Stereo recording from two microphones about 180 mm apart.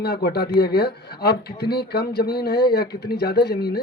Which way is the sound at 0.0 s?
65° left (ahead or behind).